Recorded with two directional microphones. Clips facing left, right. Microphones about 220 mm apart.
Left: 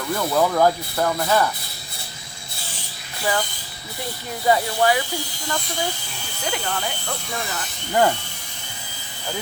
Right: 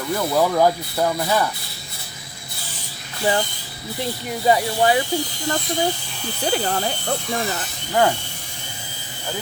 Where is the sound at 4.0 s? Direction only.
20° right (ahead or behind).